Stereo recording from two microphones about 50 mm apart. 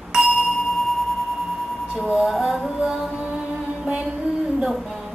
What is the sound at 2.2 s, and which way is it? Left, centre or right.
Music, centre.